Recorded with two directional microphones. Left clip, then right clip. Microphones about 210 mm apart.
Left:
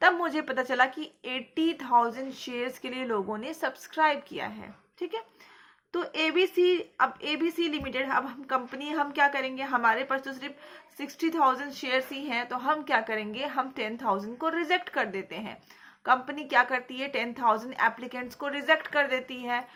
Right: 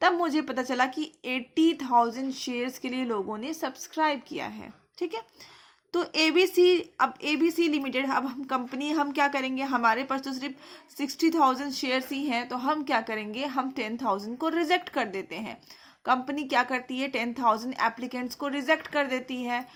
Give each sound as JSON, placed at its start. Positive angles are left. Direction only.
{"t": 0.0, "sound": "speech", "side_deg": -30}